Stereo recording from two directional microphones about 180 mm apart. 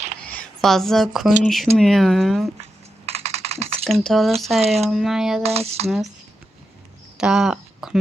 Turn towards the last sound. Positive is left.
turn(degrees=-5)  # may be behind; listen again after turning